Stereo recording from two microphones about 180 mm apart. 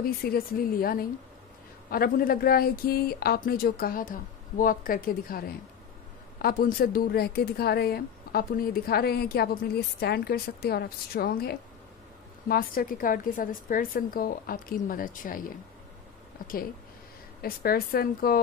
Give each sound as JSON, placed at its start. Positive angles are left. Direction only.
{"t": 0.0, "sound": "a woman's voice", "side_deg": 55}
{"t": 17.4, "sound": "a woman's voice", "side_deg": 55}